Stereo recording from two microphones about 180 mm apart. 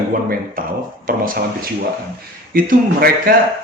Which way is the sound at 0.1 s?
55° right (ahead or behind).